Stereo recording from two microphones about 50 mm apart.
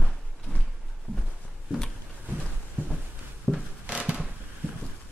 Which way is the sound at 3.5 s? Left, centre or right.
Centre.